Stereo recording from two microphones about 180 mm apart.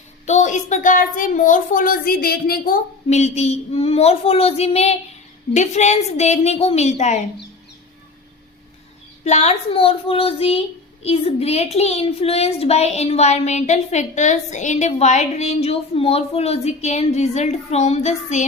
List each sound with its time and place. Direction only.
0.3 s a child's voice: 40° left (ahead or behind)
9.2 s a child's voice: 40° left (ahead or behind)